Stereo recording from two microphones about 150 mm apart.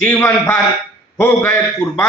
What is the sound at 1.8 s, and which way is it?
Speech, 15° left (ahead or behind).